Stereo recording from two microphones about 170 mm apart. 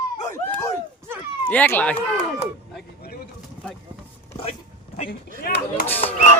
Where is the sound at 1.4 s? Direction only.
10° left (ahead or behind).